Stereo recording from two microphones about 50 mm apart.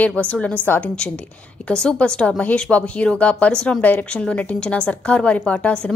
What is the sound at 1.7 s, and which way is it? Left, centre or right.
A woman's voice, centre.